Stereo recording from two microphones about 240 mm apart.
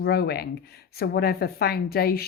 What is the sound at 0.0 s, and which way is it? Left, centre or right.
A woman's voice, left.